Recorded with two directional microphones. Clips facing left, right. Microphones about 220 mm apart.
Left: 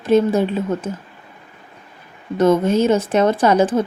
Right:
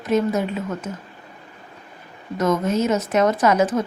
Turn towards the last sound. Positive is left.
turn(degrees=30)  # may be behind; listen again after turning